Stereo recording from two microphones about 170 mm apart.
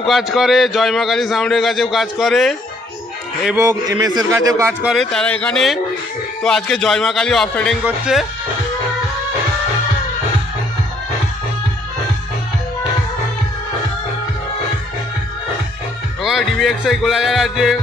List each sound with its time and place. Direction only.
0.0 s a man's voice: centre (ahead or behind)
3.5 s a man's voice: 15° right (ahead or behind)
4.8 s a man's voice: 5° left (ahead or behind)
16.2 s a man's voice: centre (ahead or behind)